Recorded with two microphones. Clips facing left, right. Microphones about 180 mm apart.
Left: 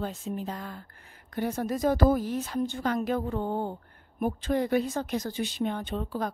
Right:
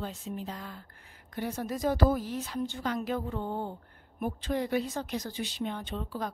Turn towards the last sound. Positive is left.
turn(degrees=50)  # may be behind; listen again after turning